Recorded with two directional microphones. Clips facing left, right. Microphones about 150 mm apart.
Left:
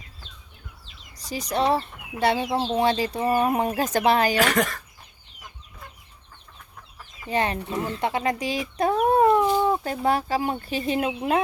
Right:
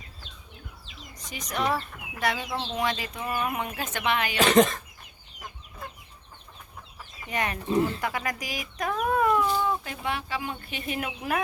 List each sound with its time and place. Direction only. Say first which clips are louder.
1.1 s speech: left 7 dB; 35° left (ahead or behind)
4.4 s speech: right 2 dB; 20° right (ahead or behind)
7.3 s speech: left 4 dB; 30° left (ahead or behind)